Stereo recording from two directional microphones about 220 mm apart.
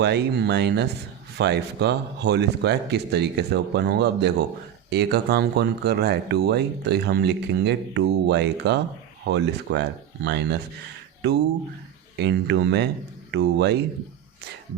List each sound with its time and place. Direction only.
0.0 s speech: 50° right (ahead or behind)